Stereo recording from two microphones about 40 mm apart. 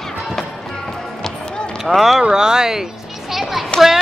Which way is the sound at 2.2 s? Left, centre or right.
Centre.